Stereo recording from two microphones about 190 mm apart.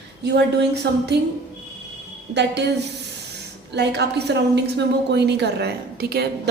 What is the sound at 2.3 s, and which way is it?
Speech, 65° right (ahead or behind).